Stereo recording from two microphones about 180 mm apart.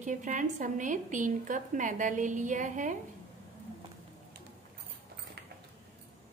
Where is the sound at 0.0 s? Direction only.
45° right (ahead or behind).